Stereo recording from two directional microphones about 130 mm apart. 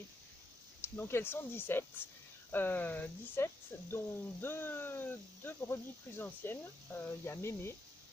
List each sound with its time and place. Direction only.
0.9 s speech: 20° left (ahead or behind)